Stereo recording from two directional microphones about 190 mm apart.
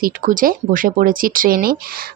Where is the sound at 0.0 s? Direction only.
45° right (ahead or behind).